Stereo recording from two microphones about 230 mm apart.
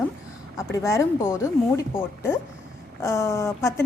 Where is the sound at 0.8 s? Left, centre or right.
Centre.